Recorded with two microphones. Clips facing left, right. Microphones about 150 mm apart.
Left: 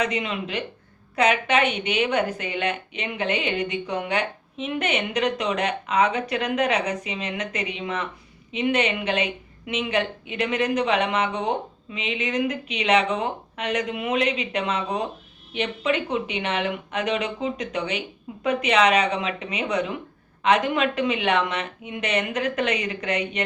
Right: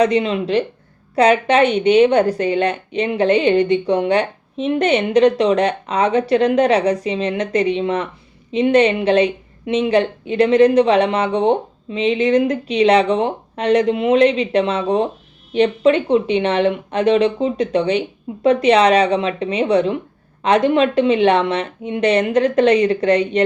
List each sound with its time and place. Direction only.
0.0 s a woman's voice: 30° right (ahead or behind)